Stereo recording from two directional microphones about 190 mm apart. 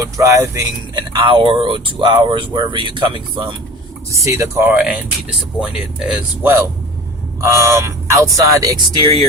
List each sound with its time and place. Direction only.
0.0 s speech: 15° right (ahead or behind)
4.1 s speech: 15° right (ahead or behind)